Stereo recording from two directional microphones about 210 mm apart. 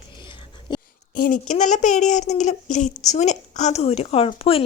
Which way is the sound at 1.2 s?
40° left (ahead or behind).